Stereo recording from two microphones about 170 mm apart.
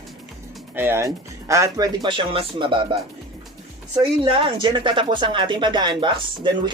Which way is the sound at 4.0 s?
30° right (ahead or behind).